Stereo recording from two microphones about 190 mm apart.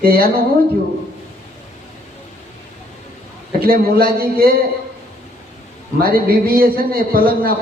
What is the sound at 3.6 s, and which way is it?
Speech, 50° right (ahead or behind).